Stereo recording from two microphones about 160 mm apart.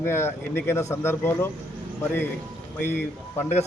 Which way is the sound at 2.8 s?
15° left (ahead or behind).